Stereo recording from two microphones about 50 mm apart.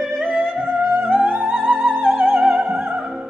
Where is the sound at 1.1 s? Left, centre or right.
Right.